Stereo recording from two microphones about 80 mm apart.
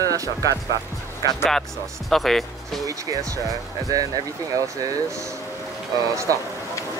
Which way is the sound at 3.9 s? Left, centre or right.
Right.